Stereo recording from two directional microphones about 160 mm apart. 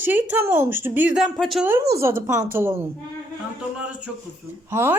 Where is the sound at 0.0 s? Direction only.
10° right (ahead or behind).